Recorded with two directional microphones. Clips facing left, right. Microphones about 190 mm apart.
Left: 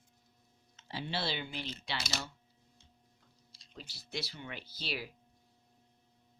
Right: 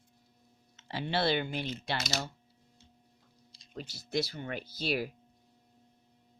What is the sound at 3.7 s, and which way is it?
Speech, 45° right (ahead or behind).